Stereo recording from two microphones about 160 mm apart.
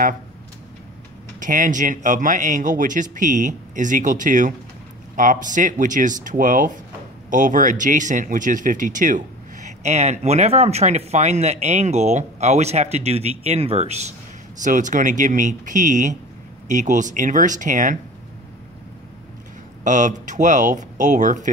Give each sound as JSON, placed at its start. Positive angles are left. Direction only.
{"t": 1.4, "sound": "speech", "side_deg": -55}
{"t": 19.8, "sound": "speech", "side_deg": -50}